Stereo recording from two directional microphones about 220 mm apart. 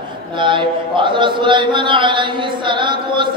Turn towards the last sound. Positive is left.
turn(degrees=-20)  # may be behind; listen again after turning